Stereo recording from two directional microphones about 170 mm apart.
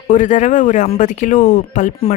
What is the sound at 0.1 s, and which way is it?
Speech, 50° left (ahead or behind).